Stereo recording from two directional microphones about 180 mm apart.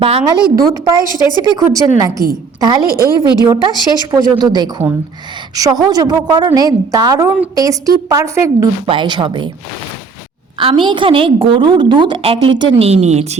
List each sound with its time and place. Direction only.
0.0 s a woman's voice: 30° right (ahead or behind)
0.3 s a woman's voice: 60° right (ahead or behind)
0.6 s a woman's voice: 20° right (ahead or behind)
10.8 s a woman's voice: 25° right (ahead or behind)